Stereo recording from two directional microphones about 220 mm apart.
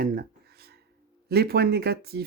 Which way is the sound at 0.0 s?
45° right (ahead or behind).